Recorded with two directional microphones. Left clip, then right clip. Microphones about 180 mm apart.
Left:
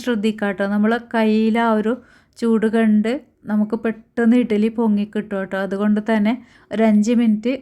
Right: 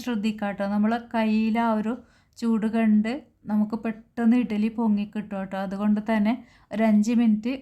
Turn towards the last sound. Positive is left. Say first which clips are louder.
# left 6 dB
turn(degrees=20)  # may be behind; listen again after turning